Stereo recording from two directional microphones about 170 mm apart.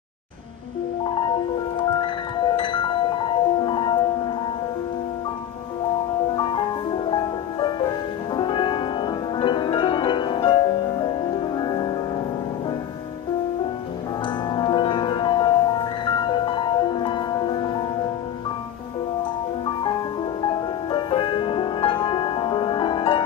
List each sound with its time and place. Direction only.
1.0 s music: 30° left (ahead or behind)
6.3 s music: 30° left (ahead or behind)
8.4 s music: 30° left (ahead or behind)
14.5 s music: 25° left (ahead or behind)
20.4 s music: 30° left (ahead or behind)